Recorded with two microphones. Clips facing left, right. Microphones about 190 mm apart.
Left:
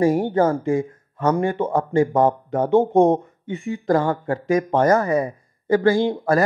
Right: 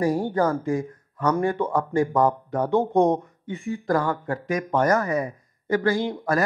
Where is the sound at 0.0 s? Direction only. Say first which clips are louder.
Left 4 dB; 25° left (ahead or behind).